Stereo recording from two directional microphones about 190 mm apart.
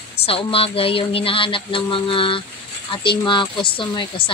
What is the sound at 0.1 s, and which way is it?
Speech, 30° left (ahead or behind).